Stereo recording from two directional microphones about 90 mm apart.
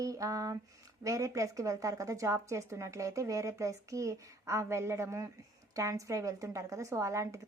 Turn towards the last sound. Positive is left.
turn(degrees=-35)  # may be behind; listen again after turning